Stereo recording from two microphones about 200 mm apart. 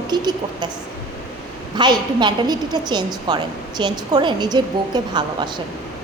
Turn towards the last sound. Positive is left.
turn(degrees=-20)  # may be behind; listen again after turning